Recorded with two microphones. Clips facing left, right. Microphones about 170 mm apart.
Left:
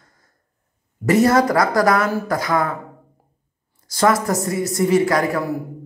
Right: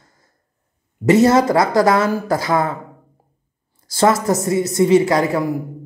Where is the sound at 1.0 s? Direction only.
25° right (ahead or behind).